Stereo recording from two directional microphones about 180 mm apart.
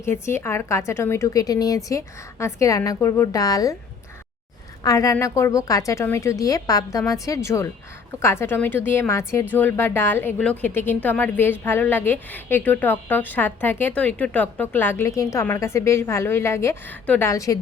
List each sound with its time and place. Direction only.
0.0 s a woman's voice: 15° left (ahead or behind)
4.8 s a woman's voice: 20° left (ahead or behind)